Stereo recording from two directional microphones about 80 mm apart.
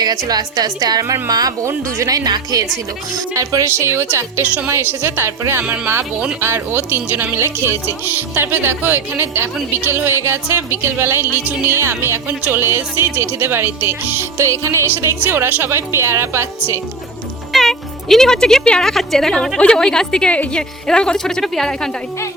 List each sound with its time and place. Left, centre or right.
0.3 s a woman's voice: right
3.3 s a woman's voice: right
4.4 s speech: centre
4.7 s speech: right
5.6 s speech: centre
14.3 s a woman's voice: right
14.9 s a woman's voice: right
17.5 s a woman's voice: centre